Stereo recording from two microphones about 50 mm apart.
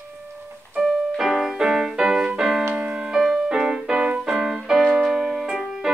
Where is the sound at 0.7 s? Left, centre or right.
Centre.